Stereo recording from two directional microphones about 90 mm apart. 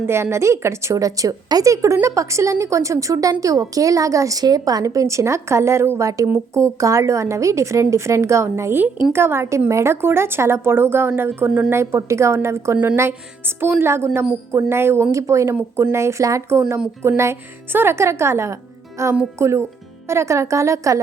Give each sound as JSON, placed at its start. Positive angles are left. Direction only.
{"t": 0.0, "sound": "a woman's voice", "side_deg": -30}